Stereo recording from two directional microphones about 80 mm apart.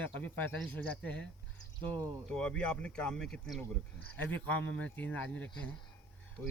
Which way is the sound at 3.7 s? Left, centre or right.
Centre.